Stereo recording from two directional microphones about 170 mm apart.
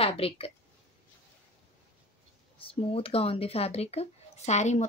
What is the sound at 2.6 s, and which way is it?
Speech, 35° left (ahead or behind).